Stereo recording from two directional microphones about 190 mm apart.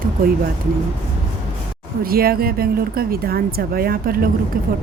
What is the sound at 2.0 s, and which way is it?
Speech, 50° right (ahead or behind).